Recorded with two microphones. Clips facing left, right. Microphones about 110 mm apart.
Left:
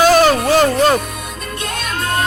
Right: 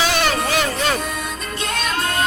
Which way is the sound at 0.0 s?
40° left (ahead or behind).